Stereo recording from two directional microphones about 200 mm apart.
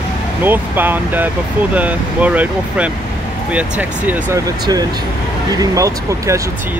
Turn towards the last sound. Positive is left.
turn(degrees=-15)  # may be behind; listen again after turning